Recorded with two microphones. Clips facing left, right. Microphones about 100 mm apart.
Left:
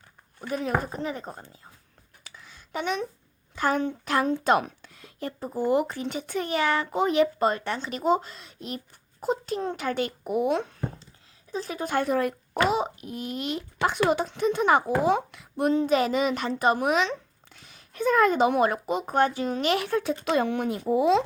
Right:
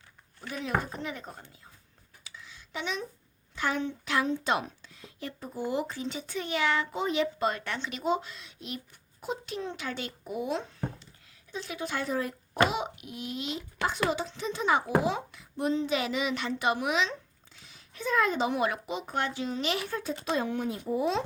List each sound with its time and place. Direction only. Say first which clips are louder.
0.3 s speech: left 4 dB; 40° left (ahead or behind)
2.2 s a sound: even; 50° left (ahead or behind)
3.5 s a child's voice: left 5 dB; 45° left (ahead or behind)
4.4 s a child's voice: left 7 dB; 55° left (ahead or behind)
7.4 s a child's voice: left 5 dB; 35° left (ahead or behind); by 10.8 s 60° left (ahead or behind)
11.5 s a child's voice: left 7 dB; 40° left (ahead or behind); by 12.7 s 60° left (ahead or behind)
12.7 s a child's voice: left 6 dB; 35° left (ahead or behind); by 21.2 s 90° left